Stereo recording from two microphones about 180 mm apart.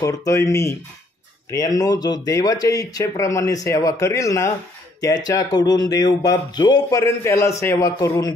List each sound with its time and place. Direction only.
0.0 s speech: 15° left (ahead or behind)